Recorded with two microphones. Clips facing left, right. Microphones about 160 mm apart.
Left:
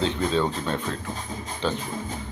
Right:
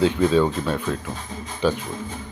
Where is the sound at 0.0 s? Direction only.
10° right (ahead or behind).